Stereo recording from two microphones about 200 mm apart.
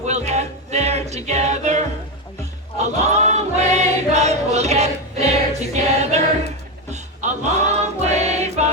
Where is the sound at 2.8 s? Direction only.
35° right (ahead or behind).